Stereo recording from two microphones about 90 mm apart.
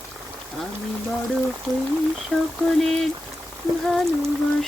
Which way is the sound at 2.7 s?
5° left (ahead or behind).